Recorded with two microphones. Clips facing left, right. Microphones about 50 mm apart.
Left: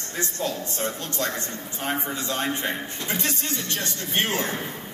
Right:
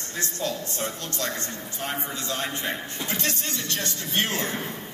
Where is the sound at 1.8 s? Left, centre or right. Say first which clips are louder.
Left 4 dB; left.